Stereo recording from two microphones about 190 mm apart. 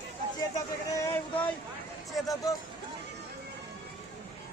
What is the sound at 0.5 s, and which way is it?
Speech, 15° left (ahead or behind).